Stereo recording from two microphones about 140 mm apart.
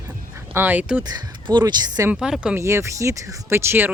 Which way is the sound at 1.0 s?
30° right (ahead or behind).